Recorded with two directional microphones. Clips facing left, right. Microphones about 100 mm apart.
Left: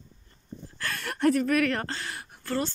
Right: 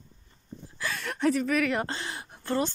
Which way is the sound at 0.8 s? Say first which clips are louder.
Left 1 dB; centre (ahead or behind).